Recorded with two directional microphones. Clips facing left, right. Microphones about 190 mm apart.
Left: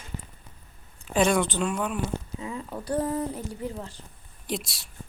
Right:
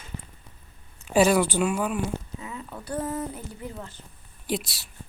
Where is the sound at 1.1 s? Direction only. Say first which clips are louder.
Right 3 dB; 5° right (ahead or behind).